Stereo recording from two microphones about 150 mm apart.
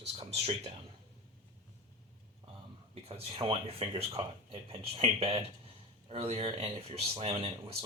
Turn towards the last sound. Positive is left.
turn(degrees=-40)  # may be behind; listen again after turning